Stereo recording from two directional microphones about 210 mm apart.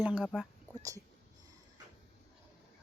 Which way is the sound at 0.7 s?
15° right (ahead or behind).